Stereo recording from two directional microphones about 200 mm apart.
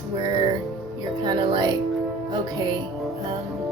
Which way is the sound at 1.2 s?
25° right (ahead or behind).